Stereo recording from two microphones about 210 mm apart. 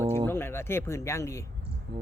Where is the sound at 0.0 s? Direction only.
30° right (ahead or behind).